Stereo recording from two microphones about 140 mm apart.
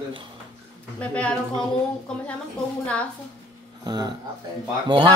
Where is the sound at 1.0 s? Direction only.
10° left (ahead or behind).